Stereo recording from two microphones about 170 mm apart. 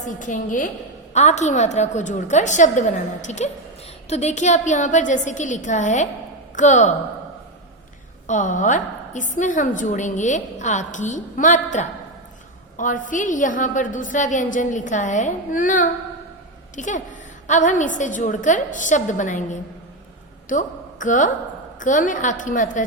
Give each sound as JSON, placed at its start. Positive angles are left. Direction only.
{"t": 0.2, "sound": "a woman's voice", "side_deg": 50}
{"t": 8.3, "sound": "a woman's voice", "side_deg": 50}